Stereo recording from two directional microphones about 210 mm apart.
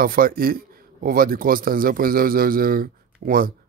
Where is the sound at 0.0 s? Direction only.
45° right (ahead or behind).